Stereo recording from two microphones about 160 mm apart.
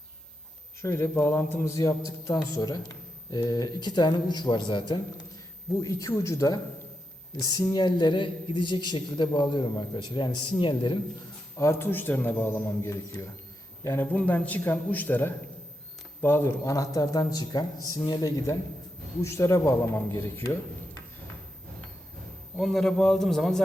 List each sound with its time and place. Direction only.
0.8 s speech: 15° left (ahead or behind)
11.5 s a man's voice: 15° left (ahead or behind)
22.5 s a man's voice: centre (ahead or behind)